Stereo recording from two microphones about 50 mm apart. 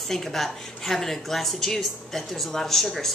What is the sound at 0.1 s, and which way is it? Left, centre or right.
A woman's voice, centre.